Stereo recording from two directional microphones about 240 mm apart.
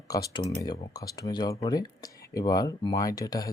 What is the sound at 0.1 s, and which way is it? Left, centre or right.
Speech, centre.